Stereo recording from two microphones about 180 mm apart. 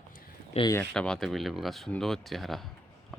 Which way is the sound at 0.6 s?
35° left (ahead or behind).